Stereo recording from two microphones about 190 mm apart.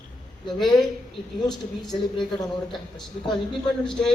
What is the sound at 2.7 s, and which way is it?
Speech, 20° left (ahead or behind).